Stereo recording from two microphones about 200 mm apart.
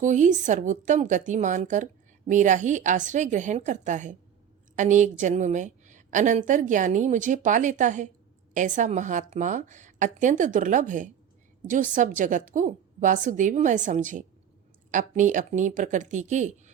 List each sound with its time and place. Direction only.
0.0 s a woman's voice: 40° right (ahead or behind)